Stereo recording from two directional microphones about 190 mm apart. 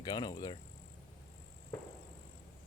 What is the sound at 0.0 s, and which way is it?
Speech, 20° left (ahead or behind).